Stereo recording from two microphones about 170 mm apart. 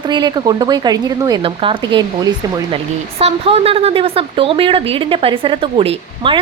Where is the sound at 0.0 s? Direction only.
25° right (ahead or behind).